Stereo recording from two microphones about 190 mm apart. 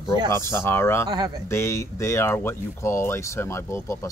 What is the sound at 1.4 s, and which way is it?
Speech, 15° left (ahead or behind).